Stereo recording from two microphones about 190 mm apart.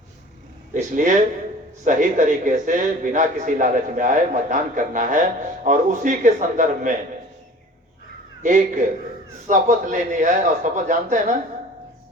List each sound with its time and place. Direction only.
0.7 s a man's voice: 40° right (ahead or behind)
8.4 s a man's voice: 45° right (ahead or behind)